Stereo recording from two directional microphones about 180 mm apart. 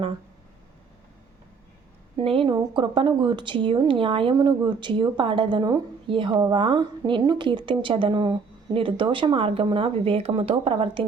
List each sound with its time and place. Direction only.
2.1 s a woman's voice: 30° right (ahead or behind)